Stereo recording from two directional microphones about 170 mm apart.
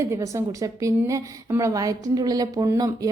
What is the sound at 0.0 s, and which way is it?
A woman's voice, 15° right (ahead or behind).